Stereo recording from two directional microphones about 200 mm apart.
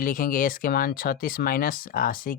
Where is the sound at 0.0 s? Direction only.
45° left (ahead or behind).